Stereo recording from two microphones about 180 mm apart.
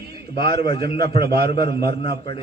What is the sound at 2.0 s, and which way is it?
Speech, 30° left (ahead or behind).